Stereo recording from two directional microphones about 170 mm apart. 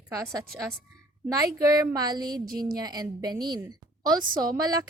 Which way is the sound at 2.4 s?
60° right (ahead or behind).